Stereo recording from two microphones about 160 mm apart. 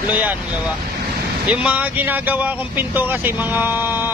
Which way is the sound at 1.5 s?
10° right (ahead or behind).